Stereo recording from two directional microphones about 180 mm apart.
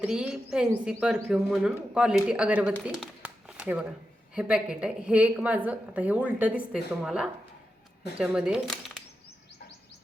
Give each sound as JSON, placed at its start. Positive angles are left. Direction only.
{"t": 0.0, "sound": "speech", "side_deg": -5}
{"t": 2.8, "sound": "a sound", "side_deg": -5}
{"t": 4.4, "sound": "a woman's voice", "side_deg": -5}